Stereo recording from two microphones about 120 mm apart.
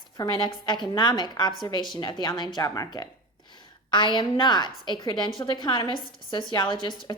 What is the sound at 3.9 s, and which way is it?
A woman's voice, 40° left (ahead or behind).